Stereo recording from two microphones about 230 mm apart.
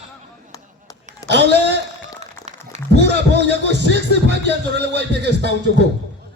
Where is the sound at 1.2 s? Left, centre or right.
Centre.